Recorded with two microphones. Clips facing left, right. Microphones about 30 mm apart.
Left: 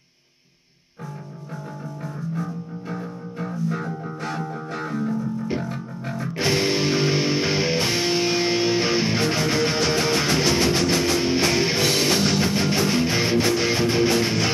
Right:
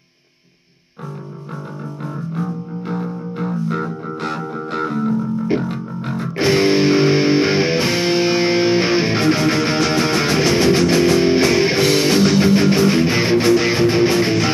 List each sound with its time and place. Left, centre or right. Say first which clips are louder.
2.9 s music: right 8 dB; right
6.3 s music: right 7 dB; right